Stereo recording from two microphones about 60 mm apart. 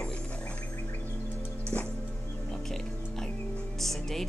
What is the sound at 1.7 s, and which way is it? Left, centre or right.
Music, left.